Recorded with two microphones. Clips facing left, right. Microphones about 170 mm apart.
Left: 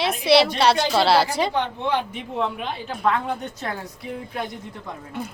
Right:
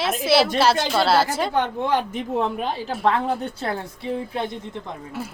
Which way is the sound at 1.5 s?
45° right (ahead or behind).